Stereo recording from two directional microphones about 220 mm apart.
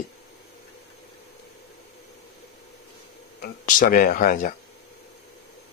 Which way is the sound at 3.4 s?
40° left (ahead or behind).